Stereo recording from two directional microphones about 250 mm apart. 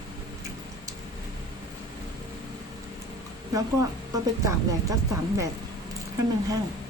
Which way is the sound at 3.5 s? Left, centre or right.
Centre.